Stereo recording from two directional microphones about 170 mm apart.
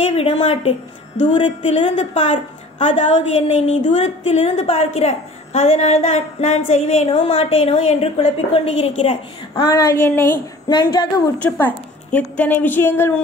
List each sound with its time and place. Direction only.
0.0 s a woman's voice: 40° left (ahead or behind)
9.6 s a woman's voice: 20° left (ahead or behind)
10.7 s a woman's voice: 25° left (ahead or behind)
11.3 s a woman's voice: 10° left (ahead or behind)